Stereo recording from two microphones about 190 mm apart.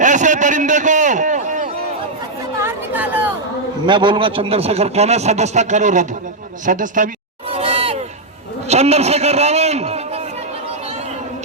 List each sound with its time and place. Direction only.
0.0 s a sound: 40° right (ahead or behind)
2.6 s chatter: 10° right (ahead or behind)
3.8 s speech: 25° right (ahead or behind); by 7.1 s 45° right (ahead or behind)
7.5 s crowd: 30° right (ahead or behind)
8.6 s a man's voice: 35° right (ahead or behind)